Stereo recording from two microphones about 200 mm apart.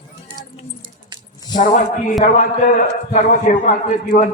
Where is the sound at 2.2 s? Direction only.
40° left (ahead or behind).